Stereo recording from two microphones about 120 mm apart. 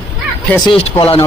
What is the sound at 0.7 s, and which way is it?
Speech, 50° left (ahead or behind).